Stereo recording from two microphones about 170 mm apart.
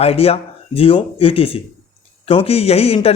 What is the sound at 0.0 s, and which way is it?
A man's voice, 35° left (ahead or behind).